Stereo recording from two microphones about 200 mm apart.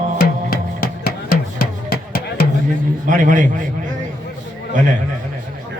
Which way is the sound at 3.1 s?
40° right (ahead or behind).